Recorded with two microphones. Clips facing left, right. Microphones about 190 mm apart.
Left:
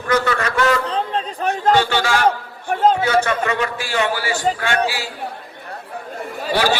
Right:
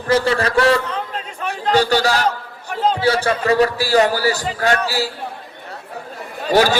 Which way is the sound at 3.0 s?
30° right (ahead or behind).